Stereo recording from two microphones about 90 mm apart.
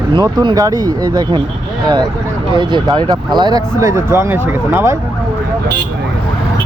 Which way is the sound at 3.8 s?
35° right (ahead or behind).